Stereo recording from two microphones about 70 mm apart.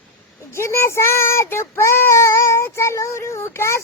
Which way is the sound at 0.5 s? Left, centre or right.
Left.